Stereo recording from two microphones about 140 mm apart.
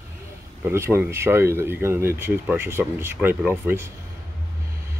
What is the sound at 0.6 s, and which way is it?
Speech, 20° right (ahead or behind).